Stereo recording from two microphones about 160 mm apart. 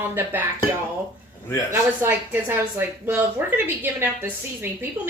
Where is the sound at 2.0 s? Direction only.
15° right (ahead or behind).